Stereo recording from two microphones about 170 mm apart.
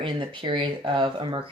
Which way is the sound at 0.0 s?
25° right (ahead or behind).